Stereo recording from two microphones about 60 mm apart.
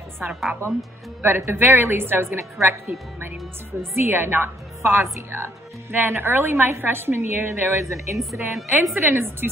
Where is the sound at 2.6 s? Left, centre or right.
Right.